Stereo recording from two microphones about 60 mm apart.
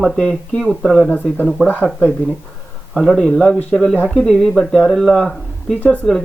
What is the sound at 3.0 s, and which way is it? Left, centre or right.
Speech, centre.